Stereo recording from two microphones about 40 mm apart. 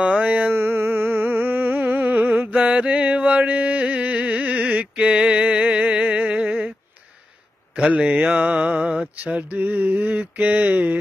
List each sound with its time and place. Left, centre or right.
0.0 s a sound: right
0.5 s music: right
2.5 s mantra: right
5.3 s music: right
8.0 s mantra: right